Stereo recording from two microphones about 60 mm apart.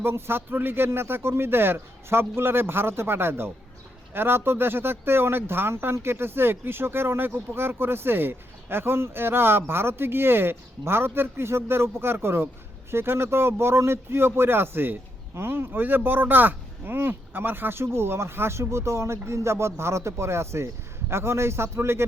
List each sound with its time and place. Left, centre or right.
0.0 s speech: right